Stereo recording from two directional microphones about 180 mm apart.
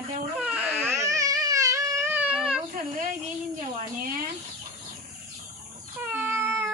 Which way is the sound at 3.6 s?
50° right (ahead or behind).